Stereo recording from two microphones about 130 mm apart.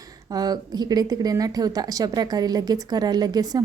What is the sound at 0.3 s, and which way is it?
A woman's voice, 30° right (ahead or behind).